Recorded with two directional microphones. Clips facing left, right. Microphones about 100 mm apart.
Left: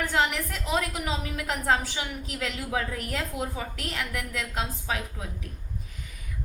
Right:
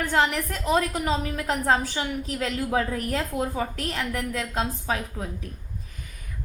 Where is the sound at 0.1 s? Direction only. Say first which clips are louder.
Right 3 dB; 40° right (ahead or behind).